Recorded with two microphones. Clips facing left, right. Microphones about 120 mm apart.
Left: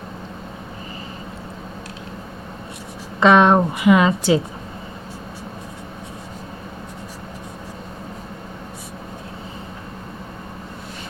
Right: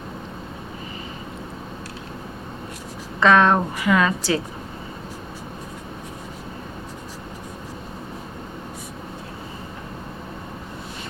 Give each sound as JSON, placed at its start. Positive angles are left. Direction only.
{"t": 3.2, "sound": "a woman's voice", "side_deg": 20}